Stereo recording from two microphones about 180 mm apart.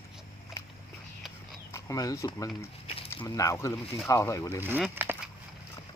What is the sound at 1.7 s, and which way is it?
Speech, 20° left (ahead or behind).